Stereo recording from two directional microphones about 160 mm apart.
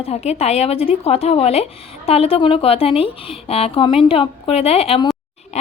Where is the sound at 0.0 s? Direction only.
40° left (ahead or behind).